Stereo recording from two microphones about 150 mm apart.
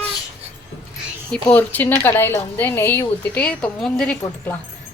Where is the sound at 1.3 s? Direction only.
10° left (ahead or behind).